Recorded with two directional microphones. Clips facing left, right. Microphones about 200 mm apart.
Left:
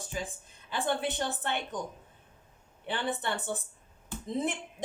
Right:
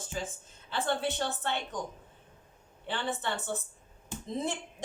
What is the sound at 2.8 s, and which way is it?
A woman's voice, 15° left (ahead or behind).